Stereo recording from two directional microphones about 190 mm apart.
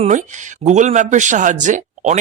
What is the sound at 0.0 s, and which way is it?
Speech, 40° right (ahead or behind).